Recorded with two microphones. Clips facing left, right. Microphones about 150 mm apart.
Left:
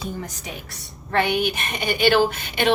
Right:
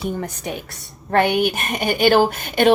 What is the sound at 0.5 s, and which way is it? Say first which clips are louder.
Speech: right 7 dB; 60° right (ahead or behind).